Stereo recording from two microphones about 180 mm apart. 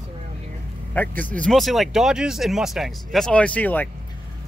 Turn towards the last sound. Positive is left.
turn(degrees=10)  # may be behind; listen again after turning